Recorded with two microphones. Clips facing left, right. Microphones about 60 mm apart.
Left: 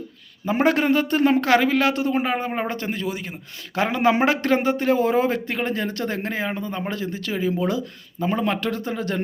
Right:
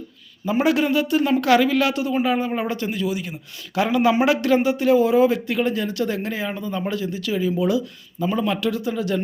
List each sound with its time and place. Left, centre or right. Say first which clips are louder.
0.5 s a man's voice: even; left